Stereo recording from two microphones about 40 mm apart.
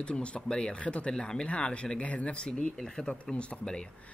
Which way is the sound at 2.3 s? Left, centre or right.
Left.